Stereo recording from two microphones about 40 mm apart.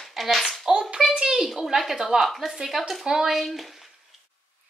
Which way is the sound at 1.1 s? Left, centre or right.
Centre.